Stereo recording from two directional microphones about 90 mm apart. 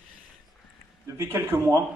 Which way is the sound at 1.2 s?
30° right (ahead or behind).